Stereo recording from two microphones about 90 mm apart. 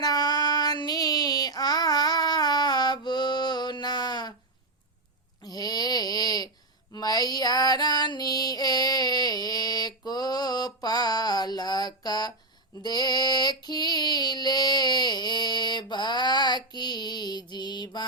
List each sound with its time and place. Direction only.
0.0 s female singing: 50° left (ahead or behind)
5.4 s a sound: 45° left (ahead or behind)
6.9 s female singing: 45° left (ahead or behind)
17.5 s mantra: 55° left (ahead or behind)